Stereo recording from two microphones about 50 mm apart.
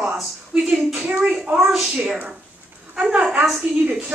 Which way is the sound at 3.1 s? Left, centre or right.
Right.